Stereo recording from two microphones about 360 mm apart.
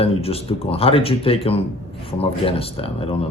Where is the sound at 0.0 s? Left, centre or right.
Centre.